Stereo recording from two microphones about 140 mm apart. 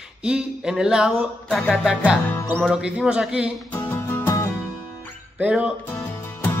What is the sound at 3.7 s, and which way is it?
Music, 15° left (ahead or behind).